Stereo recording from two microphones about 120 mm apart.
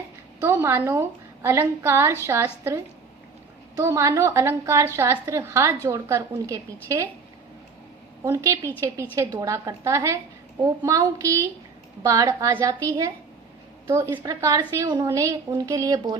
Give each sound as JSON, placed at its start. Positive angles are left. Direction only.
{"t": 0.3, "sound": "a woman's voice", "side_deg": -25}
{"t": 8.2, "sound": "a woman's voice", "side_deg": -25}